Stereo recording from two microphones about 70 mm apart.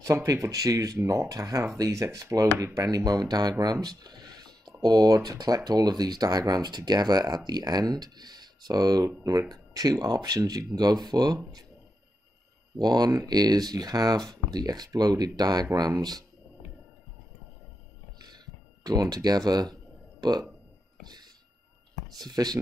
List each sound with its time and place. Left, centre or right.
0.0 s speech: right
2.6 s speech: right
12.7 s speech: right
18.2 s a sound: right
21.0 s a sound: right
22.1 s speech: right